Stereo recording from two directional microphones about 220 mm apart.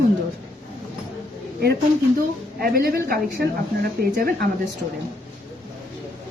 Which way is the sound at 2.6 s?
40° right (ahead or behind).